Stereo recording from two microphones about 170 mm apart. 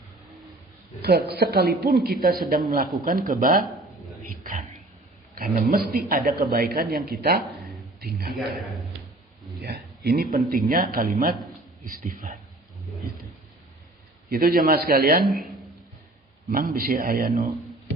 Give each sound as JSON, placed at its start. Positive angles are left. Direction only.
{"t": 1.0, "sound": "a woman's voice", "side_deg": -70}
{"t": 5.3, "sound": "speech", "side_deg": -60}
{"t": 9.6, "sound": "a man's voice", "side_deg": -70}
{"t": 14.3, "sound": "speech", "side_deg": -60}
{"t": 16.5, "sound": "speech", "side_deg": -55}